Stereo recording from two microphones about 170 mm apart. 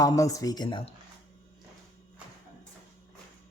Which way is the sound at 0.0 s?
20° left (ahead or behind).